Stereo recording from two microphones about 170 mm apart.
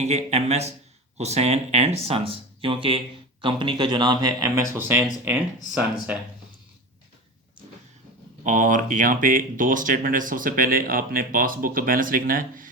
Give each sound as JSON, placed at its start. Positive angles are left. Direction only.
{"t": 0.0, "sound": "speech", "side_deg": -40}
{"t": 8.4, "sound": "speech", "side_deg": -50}